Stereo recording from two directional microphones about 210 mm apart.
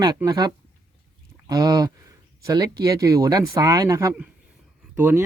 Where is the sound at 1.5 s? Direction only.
15° right (ahead or behind).